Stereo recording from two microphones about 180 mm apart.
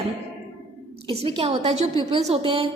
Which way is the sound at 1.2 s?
35° right (ahead or behind).